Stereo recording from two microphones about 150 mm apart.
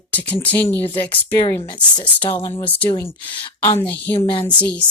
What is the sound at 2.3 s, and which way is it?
Speech, 15° left (ahead or behind).